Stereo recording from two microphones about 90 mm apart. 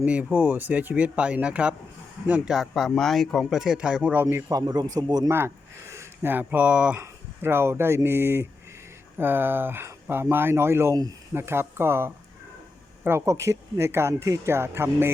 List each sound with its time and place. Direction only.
0.0 s speech: 15° right (ahead or behind)
2.5 s speech: centre (ahead or behind)
4.2 s speech: 30° right (ahead or behind)
4.5 s a man's voice: 45° right (ahead or behind)
5.9 s speech: 25° right (ahead or behind)
7.0 s speech: 25° right (ahead or behind)